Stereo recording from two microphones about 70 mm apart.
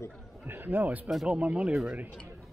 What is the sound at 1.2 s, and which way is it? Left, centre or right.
Speech, centre.